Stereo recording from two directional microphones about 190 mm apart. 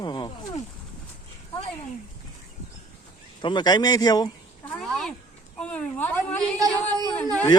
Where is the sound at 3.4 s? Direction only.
20° left (ahead or behind).